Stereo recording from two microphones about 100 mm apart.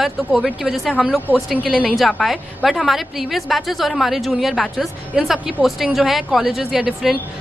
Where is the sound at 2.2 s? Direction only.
Centre (ahead or behind).